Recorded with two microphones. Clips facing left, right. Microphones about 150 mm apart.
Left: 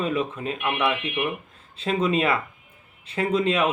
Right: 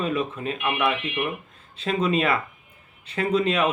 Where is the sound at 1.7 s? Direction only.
30° left (ahead or behind).